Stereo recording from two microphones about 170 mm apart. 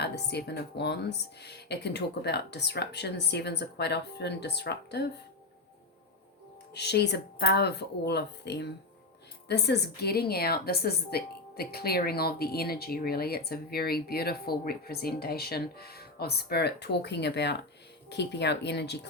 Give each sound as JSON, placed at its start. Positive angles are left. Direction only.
{"t": 0.0, "sound": "speech", "side_deg": 75}
{"t": 6.7, "sound": "a woman's voice", "side_deg": 85}